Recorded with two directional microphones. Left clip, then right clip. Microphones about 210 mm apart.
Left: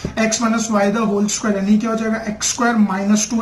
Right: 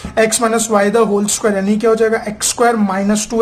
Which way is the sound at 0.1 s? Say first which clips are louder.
Right 6 dB; 50° right (ahead or behind).